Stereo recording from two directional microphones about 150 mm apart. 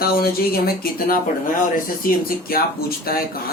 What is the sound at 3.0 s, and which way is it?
Speech, 90° left.